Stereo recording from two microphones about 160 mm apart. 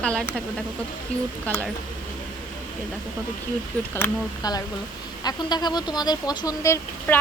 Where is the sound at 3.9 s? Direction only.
20° left (ahead or behind).